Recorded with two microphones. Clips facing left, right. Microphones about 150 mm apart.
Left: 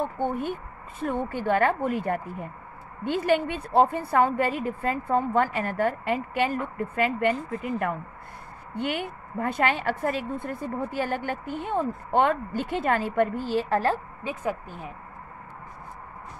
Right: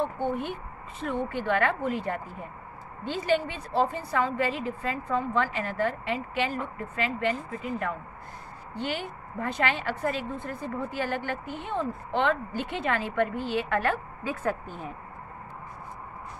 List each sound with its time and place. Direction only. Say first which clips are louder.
0.4 s a woman's voice: left 3 dB; 50° left (ahead or behind)
9.4 s a woman's voice: left 3 dB; 50° left (ahead or behind)
14.2 s speech: right 1 dB; 15° left (ahead or behind)